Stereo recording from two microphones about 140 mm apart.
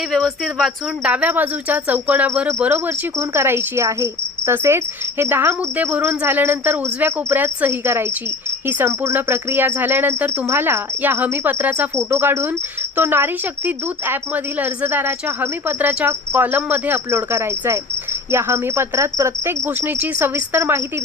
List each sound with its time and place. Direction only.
0.1 s speech: 5° left (ahead or behind)
1.0 s speech: 10° right (ahead or behind)